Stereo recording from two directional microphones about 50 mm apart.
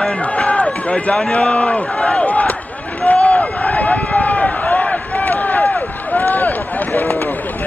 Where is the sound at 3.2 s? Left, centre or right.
Left.